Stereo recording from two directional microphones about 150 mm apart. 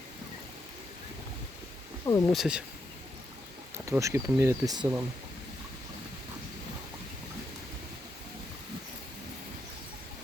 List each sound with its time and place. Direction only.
2.0 s speech: 20° left (ahead or behind)
2.3 s speech: 5° right (ahead or behind)
3.8 s speech: 20° right (ahead or behind)